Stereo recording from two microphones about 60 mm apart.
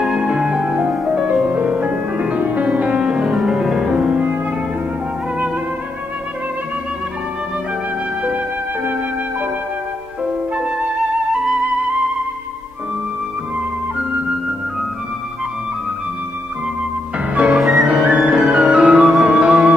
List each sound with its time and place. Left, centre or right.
0.0 s music: centre
17.5 s music: centre
17.8 s flute: centre
19.2 s music: centre